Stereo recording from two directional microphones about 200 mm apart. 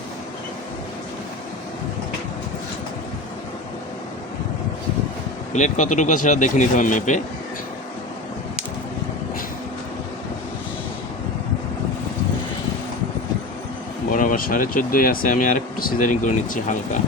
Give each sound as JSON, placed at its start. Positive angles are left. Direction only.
{"t": 5.5, "sound": "speech", "side_deg": 35}
{"t": 14.1, "sound": "speech", "side_deg": 40}